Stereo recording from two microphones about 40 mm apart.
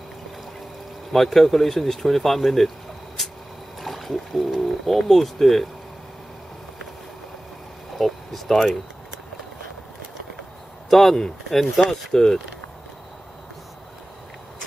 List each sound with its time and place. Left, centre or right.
1.1 s speech: centre
3.8 s speech: centre
8.0 s speech: centre
10.9 s speech: centre
12.1 s speech: centre